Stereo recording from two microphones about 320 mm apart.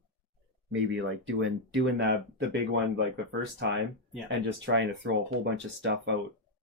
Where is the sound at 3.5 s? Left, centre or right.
Right.